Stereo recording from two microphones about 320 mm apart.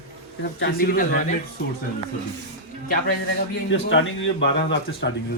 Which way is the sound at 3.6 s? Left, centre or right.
Left.